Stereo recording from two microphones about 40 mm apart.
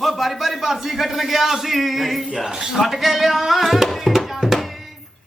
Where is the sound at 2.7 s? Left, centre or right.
Centre.